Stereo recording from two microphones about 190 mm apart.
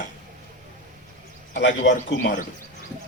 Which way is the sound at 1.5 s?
70° left (ahead or behind).